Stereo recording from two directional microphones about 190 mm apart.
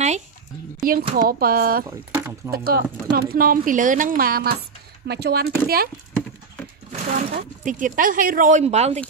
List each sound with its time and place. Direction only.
0.7 s a sound: 50° right (ahead or behind)
1.1 s speech: 50° right (ahead or behind)
1.9 s speech: 15° right (ahead or behind)
2.5 s speech: 50° right (ahead or behind)
6.9 s speech: 40° right (ahead or behind)